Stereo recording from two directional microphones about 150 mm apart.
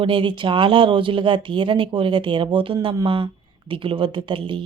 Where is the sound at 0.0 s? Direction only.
35° right (ahead or behind).